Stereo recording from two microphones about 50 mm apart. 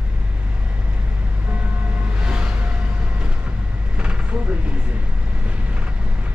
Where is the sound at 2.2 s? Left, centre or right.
Centre.